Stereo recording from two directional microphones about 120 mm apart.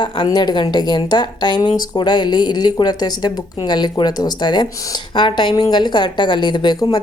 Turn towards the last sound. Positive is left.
turn(degrees=35)  # may be behind; listen again after turning